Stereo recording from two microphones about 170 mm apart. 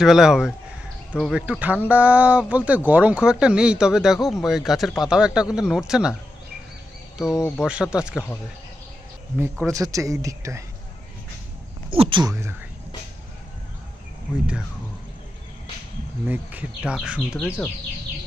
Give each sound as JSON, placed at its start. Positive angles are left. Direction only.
{"t": 0.0, "sound": "speech", "side_deg": 0}
{"t": 7.3, "sound": "speech", "side_deg": 15}
{"t": 7.6, "sound": "speech", "side_deg": -5}
{"t": 9.7, "sound": "speech", "side_deg": -20}
{"t": 11.9, "sound": "speech", "side_deg": -30}
{"t": 12.3, "sound": "speech", "side_deg": -15}
{"t": 16.2, "sound": "speech", "side_deg": -10}
{"t": 17.2, "sound": "speech", "side_deg": 5}